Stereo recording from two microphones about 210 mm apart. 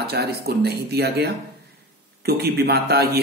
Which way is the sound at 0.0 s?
50° right (ahead or behind).